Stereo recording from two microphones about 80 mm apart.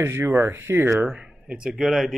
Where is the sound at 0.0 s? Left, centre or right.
Right.